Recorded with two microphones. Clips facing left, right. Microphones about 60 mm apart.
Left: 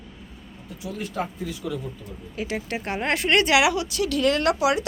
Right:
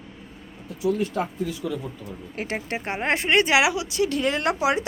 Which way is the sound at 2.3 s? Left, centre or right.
Right.